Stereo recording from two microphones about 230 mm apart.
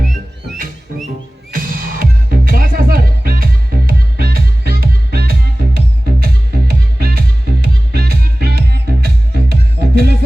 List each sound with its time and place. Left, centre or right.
0.6 s music: right